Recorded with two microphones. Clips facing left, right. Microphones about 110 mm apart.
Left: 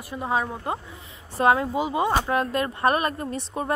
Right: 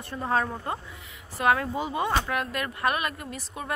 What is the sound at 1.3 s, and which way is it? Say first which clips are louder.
Speech: left 4 dB; 25° left (ahead or behind).